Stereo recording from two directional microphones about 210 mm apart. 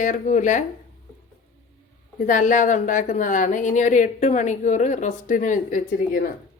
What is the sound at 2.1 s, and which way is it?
A woman's voice, 40° left (ahead or behind).